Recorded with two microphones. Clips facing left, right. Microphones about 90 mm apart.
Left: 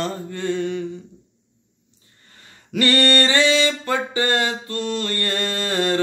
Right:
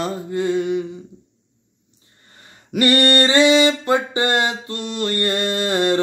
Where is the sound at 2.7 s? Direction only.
20° right (ahead or behind).